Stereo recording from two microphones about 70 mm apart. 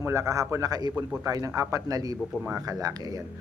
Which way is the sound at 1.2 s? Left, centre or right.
Right.